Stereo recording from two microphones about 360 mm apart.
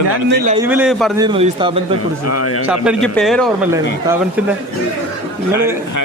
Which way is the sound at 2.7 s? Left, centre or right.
Centre.